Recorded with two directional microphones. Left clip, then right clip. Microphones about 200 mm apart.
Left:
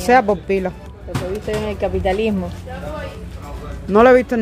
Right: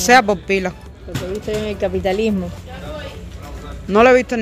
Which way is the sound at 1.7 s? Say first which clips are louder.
Even; 45° right (ahead or behind).